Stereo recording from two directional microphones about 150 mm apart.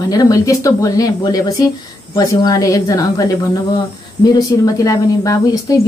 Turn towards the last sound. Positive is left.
turn(degrees=25)  # may be behind; listen again after turning